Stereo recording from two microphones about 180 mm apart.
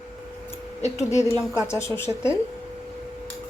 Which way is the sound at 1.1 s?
15° left (ahead or behind).